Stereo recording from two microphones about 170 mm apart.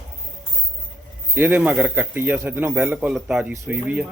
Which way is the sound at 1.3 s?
10° right (ahead or behind).